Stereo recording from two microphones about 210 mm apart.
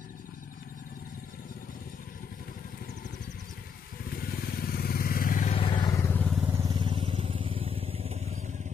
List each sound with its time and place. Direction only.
4.2 s motorcycle: 45° left (ahead or behind); by 6.4 s 5° left (ahead or behind)
6.6 s vehicle: 20° right (ahead or behind)